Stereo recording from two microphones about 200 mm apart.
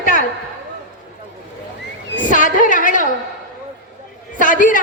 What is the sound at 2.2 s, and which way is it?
Speech, 40° left (ahead or behind).